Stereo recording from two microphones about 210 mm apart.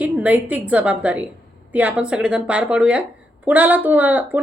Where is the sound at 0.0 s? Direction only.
5° right (ahead or behind).